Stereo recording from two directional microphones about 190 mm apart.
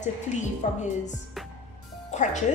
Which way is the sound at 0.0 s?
40° left (ahead or behind).